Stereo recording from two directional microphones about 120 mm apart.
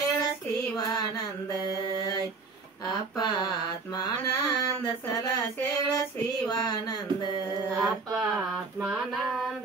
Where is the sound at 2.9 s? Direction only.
35° left (ahead or behind).